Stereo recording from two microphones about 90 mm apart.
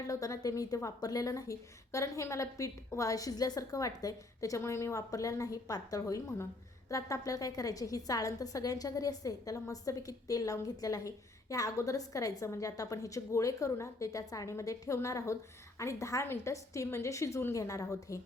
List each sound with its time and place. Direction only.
0.0 s a woman's voice: 40° left (ahead or behind)